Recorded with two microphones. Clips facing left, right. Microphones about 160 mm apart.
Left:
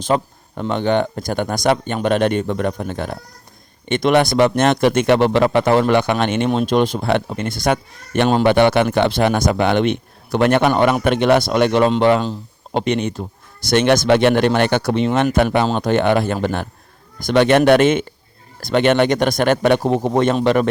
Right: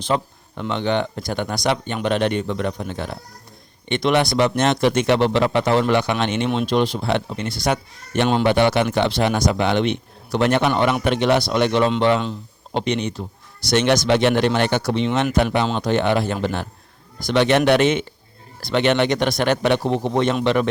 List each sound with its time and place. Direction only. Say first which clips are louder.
0.0 s speech: left 3 dB; 45° left (ahead or behind)